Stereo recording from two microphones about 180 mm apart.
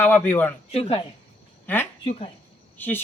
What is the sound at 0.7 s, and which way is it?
Speech, 35° left (ahead or behind).